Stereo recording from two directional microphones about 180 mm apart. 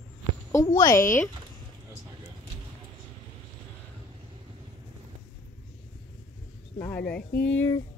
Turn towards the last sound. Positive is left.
turn(degrees=85)